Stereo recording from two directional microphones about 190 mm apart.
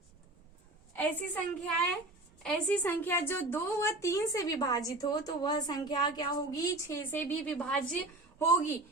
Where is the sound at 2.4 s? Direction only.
5° left (ahead or behind).